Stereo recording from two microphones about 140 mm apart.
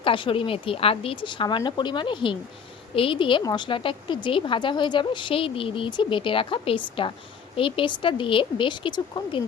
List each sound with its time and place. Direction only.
0.0 s a woman's voice: 40° left (ahead or behind)